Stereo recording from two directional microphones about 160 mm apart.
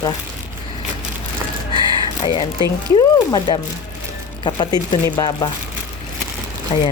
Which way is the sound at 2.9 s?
25° left (ahead or behind).